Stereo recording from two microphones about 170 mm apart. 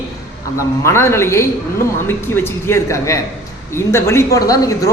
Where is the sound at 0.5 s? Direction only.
15° left (ahead or behind).